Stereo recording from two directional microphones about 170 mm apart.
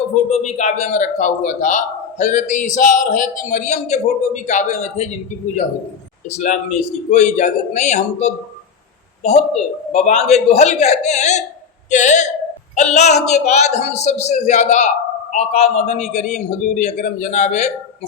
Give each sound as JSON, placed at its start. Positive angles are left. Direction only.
{"t": 0.3, "sound": "a man's voice", "side_deg": 45}
{"t": 9.9, "sound": "a man's voice", "side_deg": 40}